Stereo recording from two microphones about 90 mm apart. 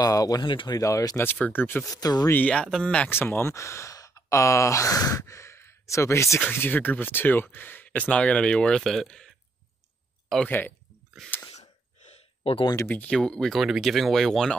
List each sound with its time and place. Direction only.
0.0 s speech: 45° left (ahead or behind)
1.2 s speech: 20° left (ahead or behind)
1.9 s speech: 45° left (ahead or behind)
2.3 s speech: 15° left (ahead or behind)
3.1 s speech: 25° left (ahead or behind); by 9.3 s 10° left (ahead or behind)
12.8 s speech: 20° left (ahead or behind)
13.1 s speech: 10° left (ahead or behind)